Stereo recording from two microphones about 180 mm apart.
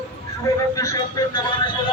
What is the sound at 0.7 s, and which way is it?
Speech, 20° left (ahead or behind).